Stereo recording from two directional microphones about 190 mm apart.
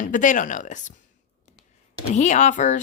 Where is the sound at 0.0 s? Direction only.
40° left (ahead or behind).